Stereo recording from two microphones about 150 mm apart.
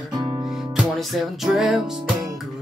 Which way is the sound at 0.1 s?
25° right (ahead or behind).